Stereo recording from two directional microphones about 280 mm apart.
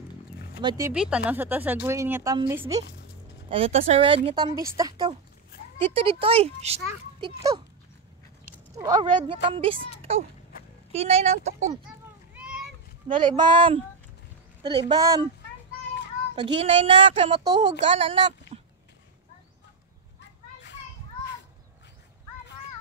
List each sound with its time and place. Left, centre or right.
0.6 s a child's voice: centre
8.7 s a child's voice: centre
10.9 s a child's voice: right
13.2 s speech: centre
16.5 s a child's voice: right
18.5 s a sound: right